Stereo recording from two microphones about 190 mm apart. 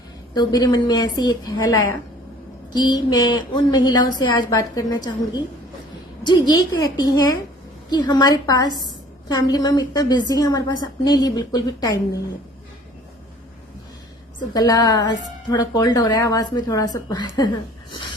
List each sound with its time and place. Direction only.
0.3 s speech: 20° left (ahead or behind)
2.7 s speech: 20° left (ahead or behind)
14.5 s speech: 20° left (ahead or behind)